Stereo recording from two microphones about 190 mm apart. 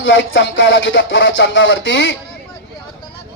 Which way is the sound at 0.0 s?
80° left.